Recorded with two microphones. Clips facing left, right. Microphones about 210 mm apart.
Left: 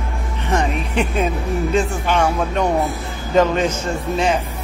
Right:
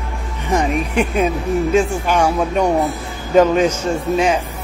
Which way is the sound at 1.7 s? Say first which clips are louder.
Right 2 dB; 10° right (ahead or behind).